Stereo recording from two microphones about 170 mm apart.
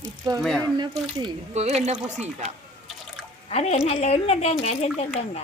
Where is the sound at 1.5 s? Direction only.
40° right (ahead or behind).